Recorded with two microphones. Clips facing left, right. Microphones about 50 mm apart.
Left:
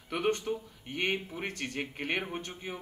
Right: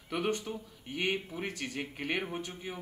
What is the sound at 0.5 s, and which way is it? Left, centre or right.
Speech, left.